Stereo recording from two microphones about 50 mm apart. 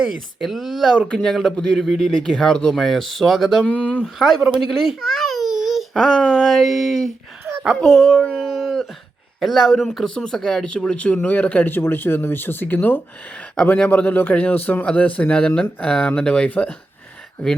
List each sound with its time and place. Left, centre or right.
0.3 s speech: centre
2.7 s speech: centre
3.6 s speech: left
4.2 s speech: centre
5.0 s baby cry: centre
6.0 s speech: centre
10.9 s speech: left
11.7 s a man's voice: left